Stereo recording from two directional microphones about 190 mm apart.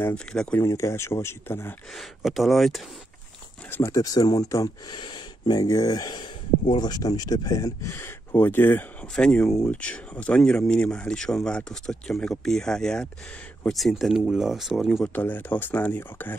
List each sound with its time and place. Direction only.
0.0 s speech: 5° left (ahead or behind)
2.0 s speech: centre (ahead or behind)
3.7 s speech: 15° left (ahead or behind)